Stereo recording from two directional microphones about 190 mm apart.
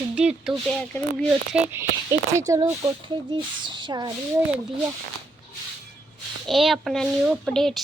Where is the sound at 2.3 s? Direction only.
15° right (ahead or behind).